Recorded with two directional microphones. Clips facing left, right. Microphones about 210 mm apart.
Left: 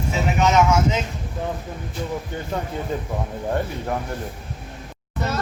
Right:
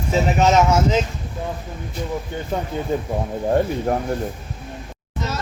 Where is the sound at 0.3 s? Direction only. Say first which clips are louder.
Right 1 dB; 35° right (ahead or behind).